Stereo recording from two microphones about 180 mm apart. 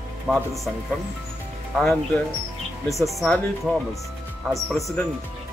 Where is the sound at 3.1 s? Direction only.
5° left (ahead or behind).